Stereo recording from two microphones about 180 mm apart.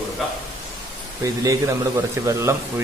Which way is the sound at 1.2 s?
20° right (ahead or behind).